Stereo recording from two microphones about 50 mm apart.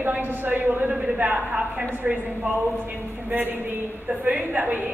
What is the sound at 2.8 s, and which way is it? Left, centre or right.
A woman's voice, right.